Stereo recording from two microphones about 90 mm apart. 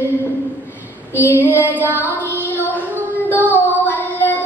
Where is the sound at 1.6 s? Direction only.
20° left (ahead or behind).